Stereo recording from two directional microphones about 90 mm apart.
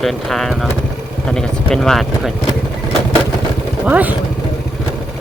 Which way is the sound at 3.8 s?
20° right (ahead or behind).